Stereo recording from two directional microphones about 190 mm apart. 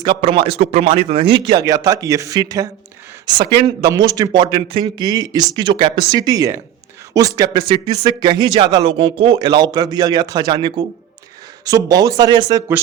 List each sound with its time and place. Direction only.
0.0 s speech: 25° right (ahead or behind)